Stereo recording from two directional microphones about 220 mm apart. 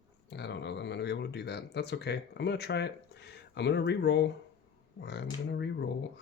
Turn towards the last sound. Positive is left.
turn(degrees=50)  # may be behind; listen again after turning